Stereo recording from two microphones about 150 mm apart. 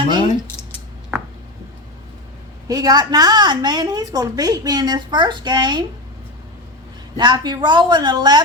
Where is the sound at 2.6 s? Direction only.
25° right (ahead or behind).